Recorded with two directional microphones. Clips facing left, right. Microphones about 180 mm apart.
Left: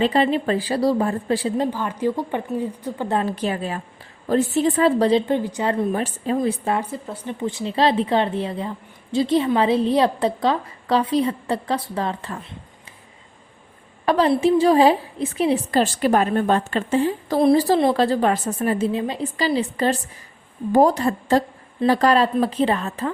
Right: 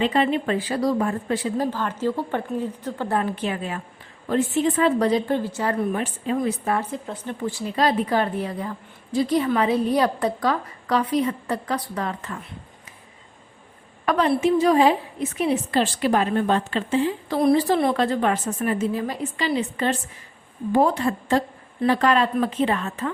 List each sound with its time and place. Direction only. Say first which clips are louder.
0.0 s a woman's voice: left 2 dB; 35° left (ahead or behind); by 3.2 s 15° left (ahead or behind)
3.2 s a woman's voice: left 3 dB; 35° left (ahead or behind)
5.3 s a woman's voice: left 2 dB; 15° left (ahead or behind)
6.0 s a woman's voice: left 2 dB; 40° left (ahead or behind)
6.3 s a woman's voice: left 2 dB; 30° left (ahead or behind)
14.0 s a woman's voice: left 3 dB; 30° left (ahead or behind)